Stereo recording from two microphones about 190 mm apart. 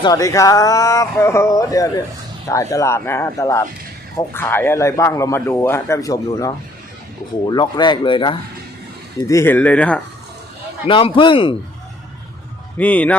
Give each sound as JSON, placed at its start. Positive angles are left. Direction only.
{"t": 0.0, "sound": "a man's voice", "side_deg": 20}
{"t": 9.2, "sound": "a man's voice", "side_deg": 15}
{"t": 10.8, "sound": "speech", "side_deg": 25}
{"t": 12.7, "sound": "a man's voice", "side_deg": 10}